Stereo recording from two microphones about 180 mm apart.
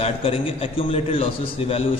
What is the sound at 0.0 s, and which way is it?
A man's voice, 30° left (ahead or behind).